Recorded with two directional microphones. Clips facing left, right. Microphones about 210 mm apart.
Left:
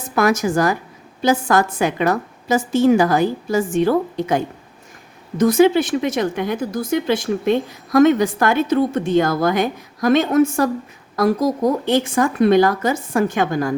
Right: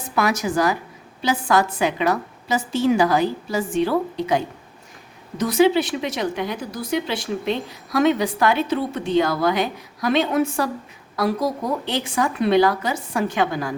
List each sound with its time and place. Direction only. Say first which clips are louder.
0.2 s a woman's voice: left 4 dB; 45° left (ahead or behind)